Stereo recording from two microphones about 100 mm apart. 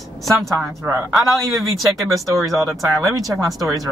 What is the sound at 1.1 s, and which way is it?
A woman's voice, centre (ahead or behind).